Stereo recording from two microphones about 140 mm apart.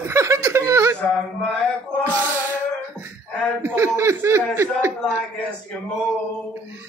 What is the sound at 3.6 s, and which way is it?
Speech, 20° right (ahead or behind).